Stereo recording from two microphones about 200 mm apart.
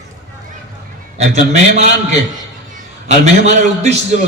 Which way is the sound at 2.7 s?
35° right (ahead or behind).